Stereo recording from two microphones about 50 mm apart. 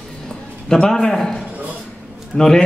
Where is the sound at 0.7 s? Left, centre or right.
Centre.